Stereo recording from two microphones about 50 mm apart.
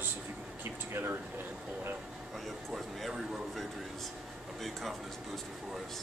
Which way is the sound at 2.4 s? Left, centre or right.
Centre.